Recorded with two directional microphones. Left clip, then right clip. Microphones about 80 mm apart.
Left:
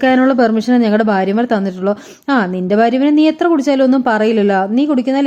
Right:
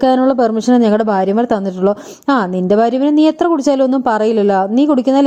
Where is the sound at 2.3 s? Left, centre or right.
Right.